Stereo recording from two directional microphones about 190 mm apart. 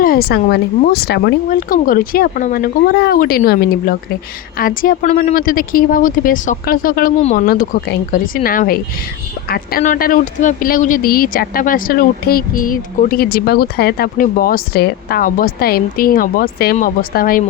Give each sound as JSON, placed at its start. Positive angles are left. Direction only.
{"t": 0.0, "sound": "speech", "side_deg": 55}
{"t": 7.2, "sound": "speech", "side_deg": 35}
{"t": 7.4, "sound": "speech", "side_deg": 50}